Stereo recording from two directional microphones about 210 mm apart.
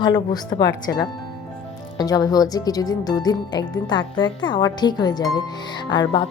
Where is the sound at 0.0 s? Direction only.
20° left (ahead or behind).